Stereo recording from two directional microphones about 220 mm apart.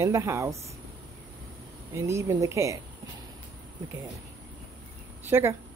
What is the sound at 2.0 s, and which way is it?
Speech, 10° right (ahead or behind).